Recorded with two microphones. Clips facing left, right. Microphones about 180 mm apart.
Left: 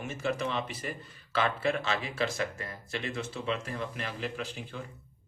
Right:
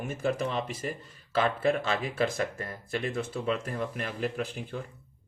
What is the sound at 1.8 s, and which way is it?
Speech, 50° right (ahead or behind).